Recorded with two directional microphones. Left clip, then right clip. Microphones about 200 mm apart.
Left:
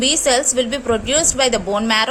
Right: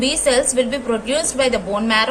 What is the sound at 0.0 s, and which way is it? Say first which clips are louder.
A woman's voice: left 1 dB; 35° left (ahead or behind).